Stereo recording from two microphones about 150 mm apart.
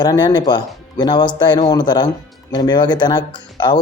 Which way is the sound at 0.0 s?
25° left (ahead or behind).